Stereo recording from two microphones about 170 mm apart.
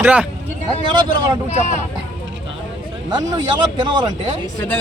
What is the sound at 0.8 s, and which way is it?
Speech, 30° right (ahead or behind).